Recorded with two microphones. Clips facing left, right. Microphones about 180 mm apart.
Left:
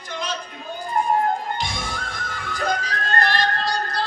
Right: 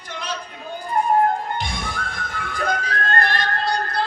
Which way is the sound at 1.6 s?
60° right (ahead or behind).